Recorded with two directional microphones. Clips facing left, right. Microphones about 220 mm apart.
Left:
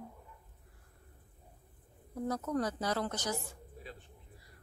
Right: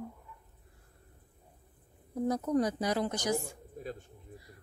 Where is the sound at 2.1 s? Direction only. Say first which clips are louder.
Right 5 dB; 15° right (ahead or behind).